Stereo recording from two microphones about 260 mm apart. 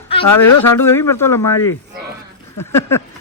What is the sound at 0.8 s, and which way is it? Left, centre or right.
Speech, centre.